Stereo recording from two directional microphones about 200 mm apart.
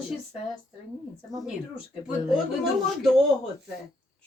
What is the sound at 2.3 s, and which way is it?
Speech, centre (ahead or behind).